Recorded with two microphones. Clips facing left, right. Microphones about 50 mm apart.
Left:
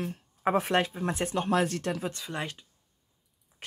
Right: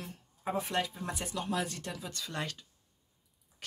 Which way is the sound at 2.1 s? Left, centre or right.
Left.